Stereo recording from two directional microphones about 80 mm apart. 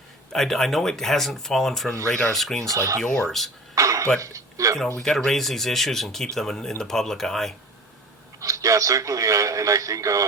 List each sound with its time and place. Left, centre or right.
0.3 s speech: centre
2.6 s speech: right
3.0 s speech: centre
3.8 s a sound: right
4.2 s speech: right
5.0 s speech: centre
8.4 s a man's voice: right